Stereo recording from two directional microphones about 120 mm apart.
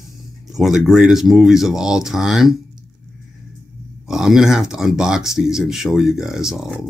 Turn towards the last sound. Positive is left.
turn(degrees=-5)  # may be behind; listen again after turning